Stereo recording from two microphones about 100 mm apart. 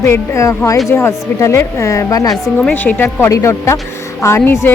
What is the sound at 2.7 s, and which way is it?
Speech, 15° left (ahead or behind).